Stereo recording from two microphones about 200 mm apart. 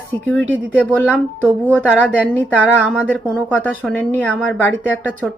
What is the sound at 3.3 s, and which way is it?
Speech, 5° left (ahead or behind).